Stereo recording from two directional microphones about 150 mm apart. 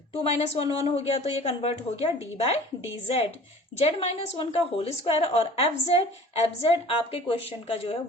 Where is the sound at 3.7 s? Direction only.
45° left (ahead or behind).